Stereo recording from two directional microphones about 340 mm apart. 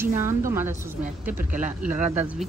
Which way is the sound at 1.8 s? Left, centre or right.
Right.